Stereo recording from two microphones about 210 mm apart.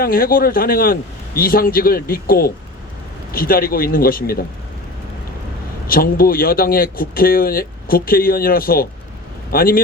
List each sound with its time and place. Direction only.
0.0 s speech: 45° left (ahead or behind)
5.9 s speech: 45° left (ahead or behind)